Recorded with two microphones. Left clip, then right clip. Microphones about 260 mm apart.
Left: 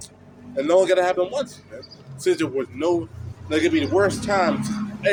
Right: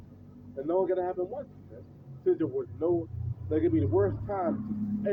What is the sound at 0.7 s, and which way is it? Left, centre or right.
Speech, centre.